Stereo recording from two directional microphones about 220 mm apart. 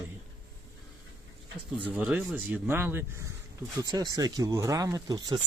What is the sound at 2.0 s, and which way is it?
Speech, 5° right (ahead or behind).